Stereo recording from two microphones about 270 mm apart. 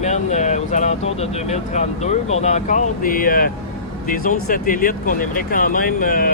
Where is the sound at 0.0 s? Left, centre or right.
Left.